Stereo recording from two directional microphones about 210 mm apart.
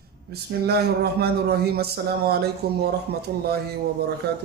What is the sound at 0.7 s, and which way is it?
Speech, 50° right (ahead or behind).